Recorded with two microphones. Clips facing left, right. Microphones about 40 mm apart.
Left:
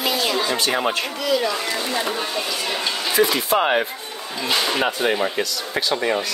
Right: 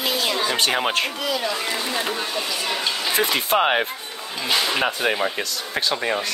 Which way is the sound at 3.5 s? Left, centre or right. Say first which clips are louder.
Even; right.